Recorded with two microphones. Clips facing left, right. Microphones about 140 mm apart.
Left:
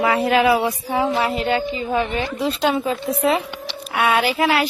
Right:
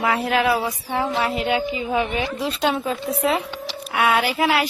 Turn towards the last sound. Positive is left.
turn(degrees=0)  # may be behind; listen again after turning